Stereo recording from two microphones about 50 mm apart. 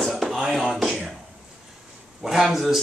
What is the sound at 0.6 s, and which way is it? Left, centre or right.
Speech, centre.